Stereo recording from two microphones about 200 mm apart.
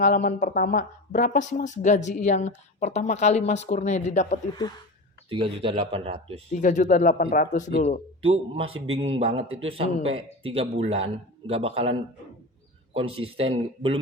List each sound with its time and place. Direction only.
0.0 s speech: 45° left (ahead or behind)
5.3 s a man's voice: 30° right (ahead or behind)
6.5 s speech: 40° left (ahead or behind)
8.2 s a man's voice: 30° right (ahead or behind)